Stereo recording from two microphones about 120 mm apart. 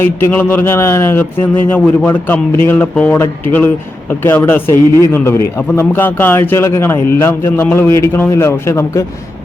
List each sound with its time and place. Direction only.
0.0 s a man's voice: 20° left (ahead or behind)